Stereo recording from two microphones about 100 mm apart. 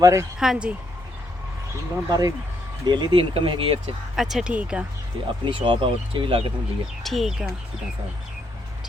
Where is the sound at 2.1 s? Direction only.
40° right (ahead or behind).